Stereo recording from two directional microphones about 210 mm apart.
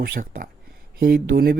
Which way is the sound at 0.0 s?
45° right (ahead or behind).